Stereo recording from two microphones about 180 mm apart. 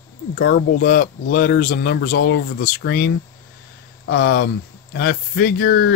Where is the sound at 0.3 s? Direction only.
50° left (ahead or behind).